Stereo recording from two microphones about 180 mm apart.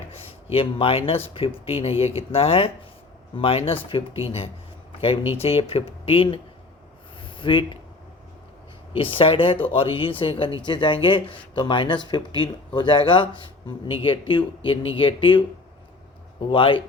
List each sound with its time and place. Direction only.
0.5 s speech: 30° left (ahead or behind)
8.9 s speech: 30° left (ahead or behind)
16.5 s speech: 30° left (ahead or behind)